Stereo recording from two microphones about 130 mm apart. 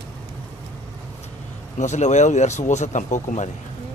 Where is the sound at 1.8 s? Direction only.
65° left (ahead or behind).